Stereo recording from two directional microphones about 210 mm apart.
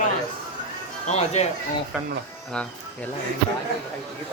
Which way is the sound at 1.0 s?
30° left (ahead or behind).